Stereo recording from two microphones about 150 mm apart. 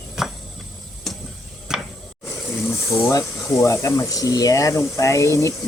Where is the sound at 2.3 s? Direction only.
15° left (ahead or behind).